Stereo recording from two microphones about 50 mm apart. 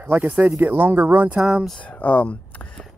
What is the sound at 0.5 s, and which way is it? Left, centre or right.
Speech, right.